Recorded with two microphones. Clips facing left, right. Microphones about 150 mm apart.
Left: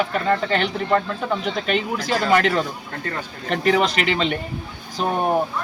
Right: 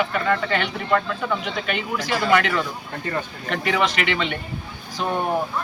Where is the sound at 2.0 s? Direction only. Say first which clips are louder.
Left 1 dB; 35° left (ahead or behind).